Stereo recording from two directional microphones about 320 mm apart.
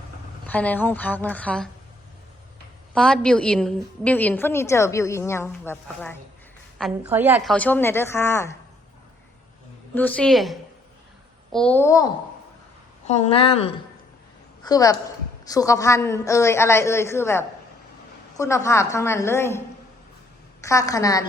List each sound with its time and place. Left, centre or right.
0.4 s a woman's voice: centre
2.9 s a woman's voice: centre
9.9 s a woman's voice: centre
13.1 s a woman's voice: centre